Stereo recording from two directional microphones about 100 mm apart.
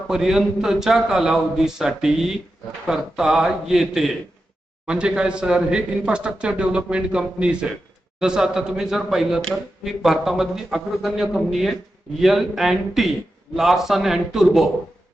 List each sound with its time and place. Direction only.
0.1 s a man's voice: 5° right (ahead or behind)